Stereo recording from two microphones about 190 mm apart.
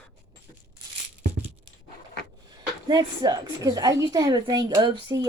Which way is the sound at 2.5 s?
20° right (ahead or behind).